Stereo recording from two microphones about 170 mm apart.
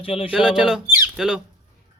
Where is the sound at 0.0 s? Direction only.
35° left (ahead or behind).